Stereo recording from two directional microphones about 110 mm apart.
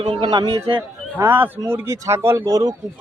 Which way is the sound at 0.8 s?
20° right (ahead or behind).